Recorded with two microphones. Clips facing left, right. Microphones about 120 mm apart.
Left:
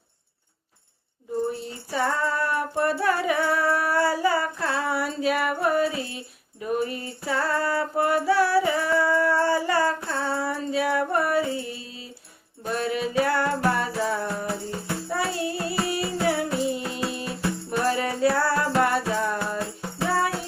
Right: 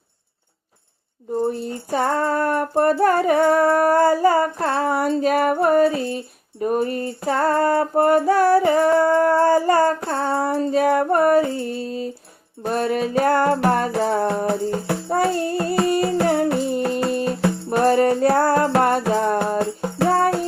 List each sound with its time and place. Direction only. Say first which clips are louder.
1.5 s music: right 7 dB; 45° right (ahead or behind)